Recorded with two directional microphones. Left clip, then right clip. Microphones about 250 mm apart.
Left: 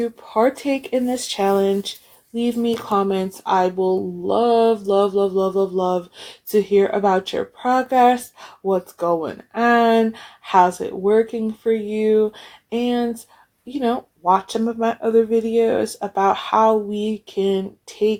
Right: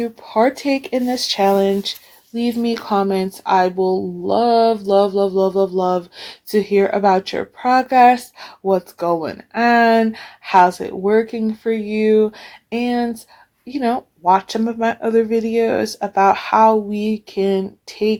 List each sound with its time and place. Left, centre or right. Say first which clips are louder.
0.0 s speech: right 2 dB; right